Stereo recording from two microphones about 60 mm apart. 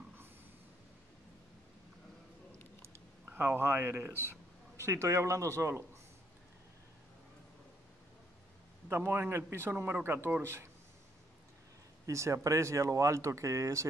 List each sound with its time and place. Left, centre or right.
3.3 s speech: right
4.7 s speech: right
8.8 s a man's voice: right
12.1 s speech: right